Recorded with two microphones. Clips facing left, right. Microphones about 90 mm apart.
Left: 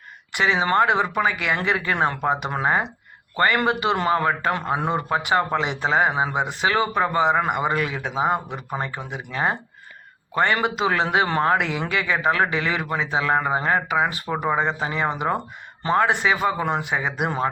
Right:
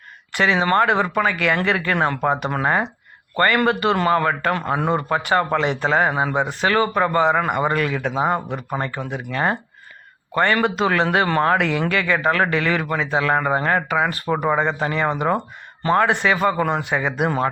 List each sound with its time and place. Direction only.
0.3 s speech: 15° left (ahead or behind)